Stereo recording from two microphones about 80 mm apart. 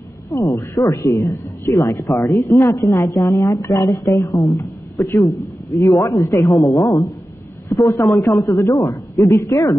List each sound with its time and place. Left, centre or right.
0.3 s a woman's voice: left